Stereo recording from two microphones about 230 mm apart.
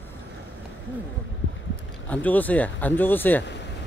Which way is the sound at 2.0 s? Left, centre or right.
Centre.